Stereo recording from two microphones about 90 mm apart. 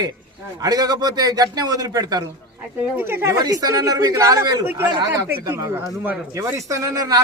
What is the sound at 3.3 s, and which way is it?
A man's voice, 45° right (ahead or behind).